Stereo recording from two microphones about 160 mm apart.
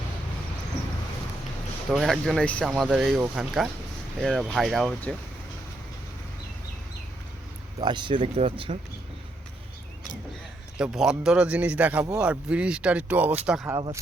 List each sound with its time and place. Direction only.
1.9 s speech: centre (ahead or behind)
7.8 s speech: 30° right (ahead or behind)
10.8 s speech: 5° right (ahead or behind)
13.7 s speech: 25° right (ahead or behind)